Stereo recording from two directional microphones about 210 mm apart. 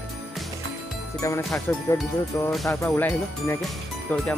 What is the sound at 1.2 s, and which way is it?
Speech, 15° left (ahead or behind).